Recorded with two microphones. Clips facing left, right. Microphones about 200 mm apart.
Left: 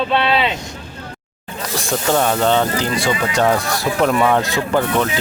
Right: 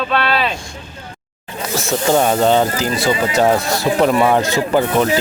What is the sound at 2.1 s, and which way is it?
Speech, 15° right (ahead or behind).